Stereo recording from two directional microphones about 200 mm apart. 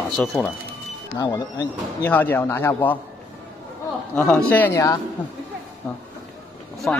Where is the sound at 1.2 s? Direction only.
20° left (ahead or behind).